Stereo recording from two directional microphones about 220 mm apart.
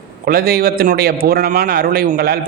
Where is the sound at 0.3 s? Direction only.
45° right (ahead or behind).